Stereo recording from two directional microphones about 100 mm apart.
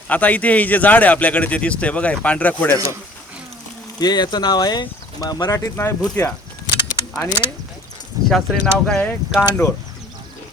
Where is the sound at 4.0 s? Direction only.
45° left (ahead or behind).